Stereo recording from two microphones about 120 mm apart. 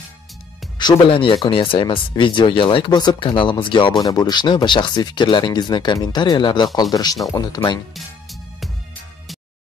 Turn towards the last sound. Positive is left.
turn(degrees=35)  # may be behind; listen again after turning